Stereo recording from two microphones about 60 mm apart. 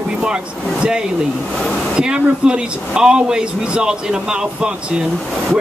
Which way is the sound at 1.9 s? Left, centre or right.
Centre.